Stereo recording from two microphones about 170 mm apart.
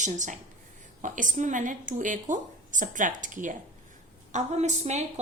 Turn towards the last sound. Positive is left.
turn(degrees=-40)  # may be behind; listen again after turning